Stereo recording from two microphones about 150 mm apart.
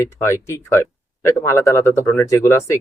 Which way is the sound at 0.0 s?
20° left (ahead or behind).